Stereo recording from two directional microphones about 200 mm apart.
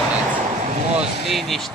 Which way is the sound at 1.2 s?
Centre (ahead or behind).